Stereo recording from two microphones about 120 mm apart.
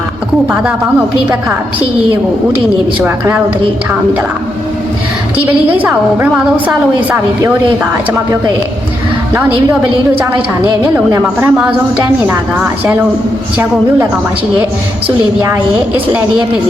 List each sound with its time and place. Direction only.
3.0 s a woman's voice: 15° right (ahead or behind)
5.7 s a woman's voice: 15° right (ahead or behind)
10.2 s a woman's voice: 15° right (ahead or behind)
15.4 s a woman's voice: 20° right (ahead or behind)